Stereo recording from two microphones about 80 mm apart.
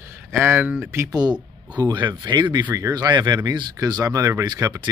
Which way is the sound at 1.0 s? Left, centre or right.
Right.